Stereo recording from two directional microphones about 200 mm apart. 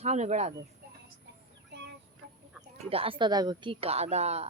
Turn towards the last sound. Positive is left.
turn(degrees=-30)  # may be behind; listen again after turning